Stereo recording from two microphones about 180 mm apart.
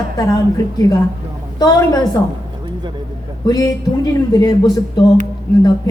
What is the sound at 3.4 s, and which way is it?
Speech, 20° left (ahead or behind).